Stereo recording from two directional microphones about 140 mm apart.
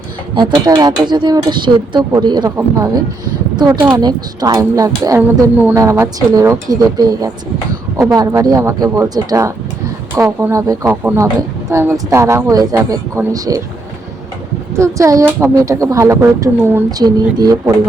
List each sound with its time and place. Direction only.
0.3 s speech: 30° right (ahead or behind)
5.5 s speech: 10° right (ahead or behind)
14.8 s speech: 20° right (ahead or behind)
17.0 s speech: 30° right (ahead or behind)